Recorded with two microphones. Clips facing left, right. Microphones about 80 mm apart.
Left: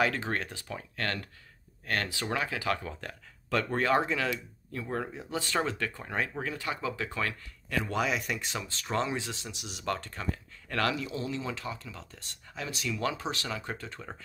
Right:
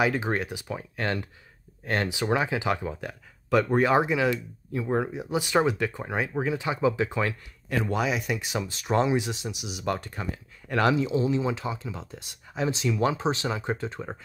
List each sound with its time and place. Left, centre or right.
0.0 s speech: centre
7.9 s speech: centre; by 14.1 s right